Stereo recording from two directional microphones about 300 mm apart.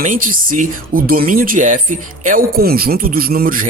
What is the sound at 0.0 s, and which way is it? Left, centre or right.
Speech, right.